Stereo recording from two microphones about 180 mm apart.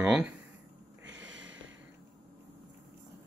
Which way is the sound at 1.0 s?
90° right.